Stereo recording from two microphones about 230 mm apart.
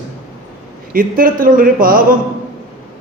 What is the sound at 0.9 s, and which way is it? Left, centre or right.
A man's voice, right.